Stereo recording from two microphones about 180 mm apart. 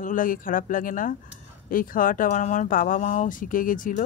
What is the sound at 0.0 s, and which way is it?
Speech, 50° left (ahead or behind).